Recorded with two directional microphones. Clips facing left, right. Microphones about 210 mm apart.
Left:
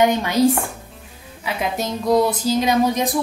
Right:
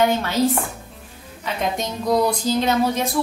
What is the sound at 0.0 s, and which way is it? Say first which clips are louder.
Music: left 3 dB; 15° left (ahead or behind).